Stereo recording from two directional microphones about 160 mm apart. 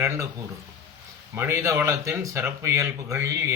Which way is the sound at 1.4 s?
15° right (ahead or behind).